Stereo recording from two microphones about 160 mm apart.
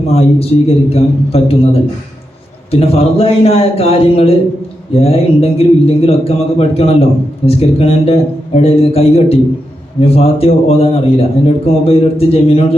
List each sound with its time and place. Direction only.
0.1 s a man's voice: 40° left (ahead or behind)